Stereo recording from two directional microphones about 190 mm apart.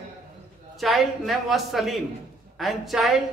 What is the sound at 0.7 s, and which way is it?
A man's voice, centre (ahead or behind).